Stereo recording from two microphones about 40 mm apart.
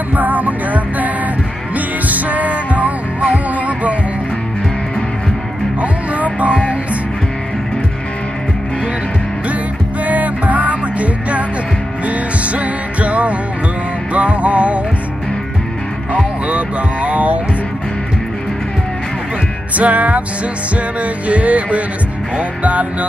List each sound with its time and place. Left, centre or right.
0.1 s music: right
5.8 s music: right
10.0 s music: right
16.4 s a sound: right
19.8 s music: right